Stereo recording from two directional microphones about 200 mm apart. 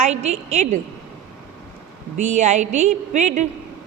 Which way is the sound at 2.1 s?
35° right (ahead or behind).